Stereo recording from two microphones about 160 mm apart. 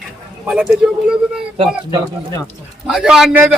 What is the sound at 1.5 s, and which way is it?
Speech, 35° right (ahead or behind).